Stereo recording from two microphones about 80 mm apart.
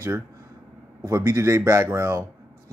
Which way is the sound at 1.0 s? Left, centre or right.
Right.